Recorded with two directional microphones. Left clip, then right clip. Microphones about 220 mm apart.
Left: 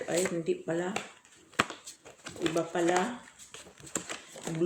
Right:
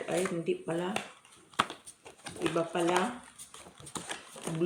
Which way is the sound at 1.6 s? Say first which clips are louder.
Left 1 dB; 5° left (ahead or behind).